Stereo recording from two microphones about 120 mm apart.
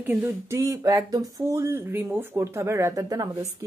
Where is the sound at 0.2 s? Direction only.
25° right (ahead or behind).